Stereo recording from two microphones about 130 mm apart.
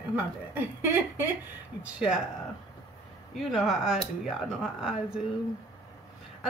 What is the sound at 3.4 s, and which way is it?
Speech, centre (ahead or behind).